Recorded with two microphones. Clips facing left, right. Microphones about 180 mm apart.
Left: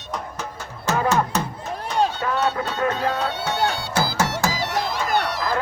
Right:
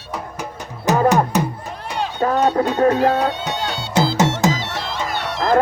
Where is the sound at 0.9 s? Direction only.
15° right (ahead or behind).